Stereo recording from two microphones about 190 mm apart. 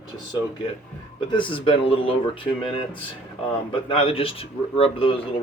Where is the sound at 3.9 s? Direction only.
30° left (ahead or behind).